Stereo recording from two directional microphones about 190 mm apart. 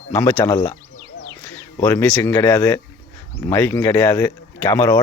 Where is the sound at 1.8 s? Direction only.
10° left (ahead or behind).